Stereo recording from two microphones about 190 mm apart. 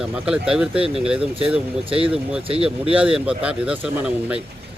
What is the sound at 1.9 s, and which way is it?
Speech, 30° right (ahead or behind).